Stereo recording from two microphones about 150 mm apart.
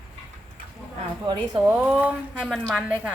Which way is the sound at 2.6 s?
10° right (ahead or behind).